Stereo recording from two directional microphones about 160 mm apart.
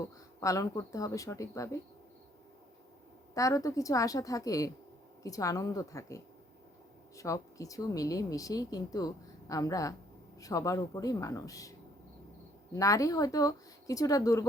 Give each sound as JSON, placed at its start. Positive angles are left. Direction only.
{"t": 0.3, "sound": "speech", "side_deg": 20}
{"t": 3.3, "sound": "speech", "side_deg": 20}
{"t": 12.7, "sound": "speech", "side_deg": 20}